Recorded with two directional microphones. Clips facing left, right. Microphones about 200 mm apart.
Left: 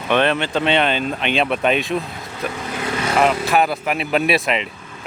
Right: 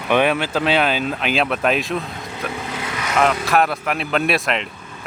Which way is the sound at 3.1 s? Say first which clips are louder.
Even; centre (ahead or behind).